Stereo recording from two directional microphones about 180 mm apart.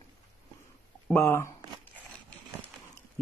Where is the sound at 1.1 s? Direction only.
15° left (ahead or behind).